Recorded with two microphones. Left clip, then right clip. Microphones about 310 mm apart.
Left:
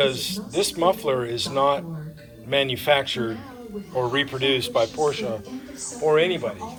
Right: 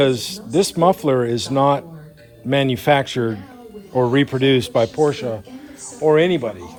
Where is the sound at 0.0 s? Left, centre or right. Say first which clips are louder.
Right 4 dB; right.